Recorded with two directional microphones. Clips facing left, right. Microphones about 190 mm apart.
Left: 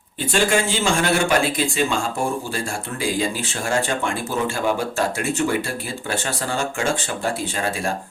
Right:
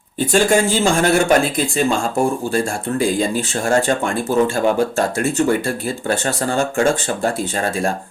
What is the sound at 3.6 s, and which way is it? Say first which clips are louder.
Speech: right 5 dB; 40° right (ahead or behind).